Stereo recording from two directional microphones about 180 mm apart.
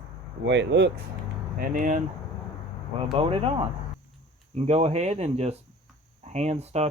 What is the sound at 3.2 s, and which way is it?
Speech, 30° right (ahead or behind).